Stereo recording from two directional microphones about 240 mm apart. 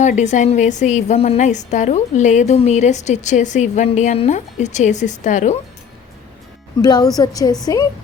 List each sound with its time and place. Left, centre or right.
0.0 s a woman's voice: left
6.8 s a woman's voice: centre